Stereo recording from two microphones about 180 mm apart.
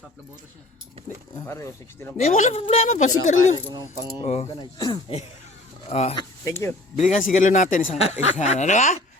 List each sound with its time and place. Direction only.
1.4 s speech: 15° left (ahead or behind)
2.1 s a woman's voice: 40° left (ahead or behind)
4.2 s a woman's voice: 30° left (ahead or behind)
5.9 s a woman's voice: 35° left (ahead or behind)
6.4 s speech: 15° left (ahead or behind)
6.9 s speech: 40° left (ahead or behind)